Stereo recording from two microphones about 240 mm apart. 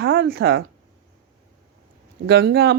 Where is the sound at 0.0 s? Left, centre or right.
Right.